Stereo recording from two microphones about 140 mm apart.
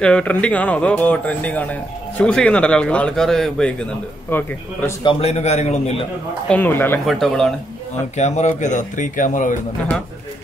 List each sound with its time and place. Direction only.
0.0 s speech: 10° left (ahead or behind)
5.0 s a man's voice: 50° left (ahead or behind)
6.5 s speech: 15° left (ahead or behind)
7.1 s speech: 5° left (ahead or behind)
8.2 s speech: 55° left (ahead or behind)